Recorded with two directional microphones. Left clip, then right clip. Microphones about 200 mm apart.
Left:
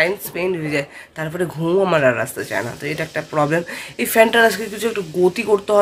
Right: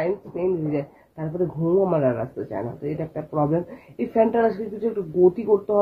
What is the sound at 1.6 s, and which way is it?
Speech, 30° left (ahead or behind).